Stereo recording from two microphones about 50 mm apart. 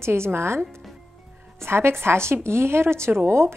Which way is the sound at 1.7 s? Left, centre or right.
Right.